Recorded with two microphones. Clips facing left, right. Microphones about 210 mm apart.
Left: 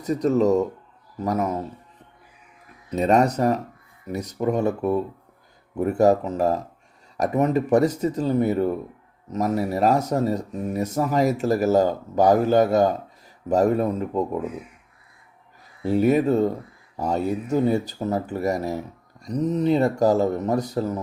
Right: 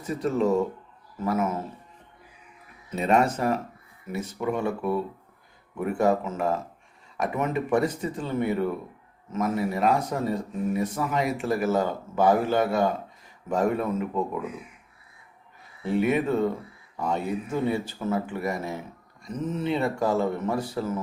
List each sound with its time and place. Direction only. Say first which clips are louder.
0.0 s speech: left 5 dB; 40° left (ahead or behind)
2.9 s speech: left 4 dB; 40° left (ahead or behind)
15.9 s speech: left 5 dB; 40° left (ahead or behind)